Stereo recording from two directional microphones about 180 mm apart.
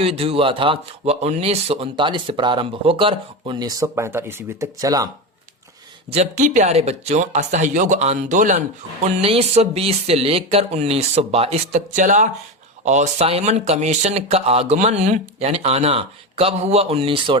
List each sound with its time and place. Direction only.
0.0 s speech: 30° right (ahead or behind)
6.1 s speech: 40° right (ahead or behind)